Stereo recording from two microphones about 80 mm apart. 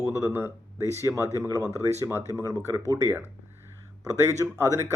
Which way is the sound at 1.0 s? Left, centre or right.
Right.